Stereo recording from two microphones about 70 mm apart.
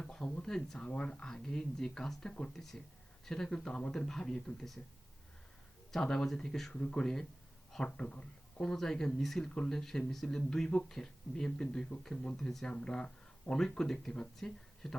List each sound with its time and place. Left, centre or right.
0.0 s speech: centre
5.9 s speech: centre